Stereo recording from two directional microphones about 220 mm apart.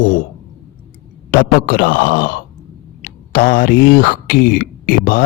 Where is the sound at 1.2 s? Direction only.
40° left (ahead or behind).